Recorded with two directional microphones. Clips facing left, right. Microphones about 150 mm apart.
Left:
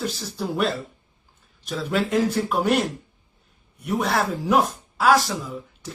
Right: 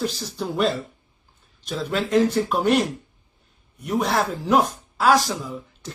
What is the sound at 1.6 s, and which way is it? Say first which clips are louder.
Speech: left 1 dB; centre (ahead or behind).